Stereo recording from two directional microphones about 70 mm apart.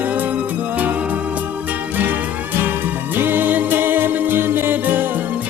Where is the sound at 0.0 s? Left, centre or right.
Right.